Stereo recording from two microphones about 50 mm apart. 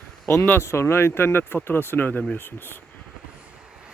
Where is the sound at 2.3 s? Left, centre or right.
Left.